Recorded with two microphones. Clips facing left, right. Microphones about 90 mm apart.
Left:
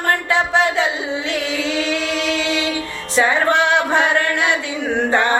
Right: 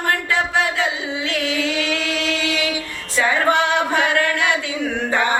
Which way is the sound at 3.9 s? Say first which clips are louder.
Left 2 dB; 25° left (ahead or behind).